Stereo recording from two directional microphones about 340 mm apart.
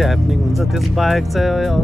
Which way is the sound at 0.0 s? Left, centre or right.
Centre.